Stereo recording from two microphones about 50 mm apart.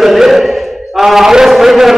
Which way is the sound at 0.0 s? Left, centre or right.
Centre.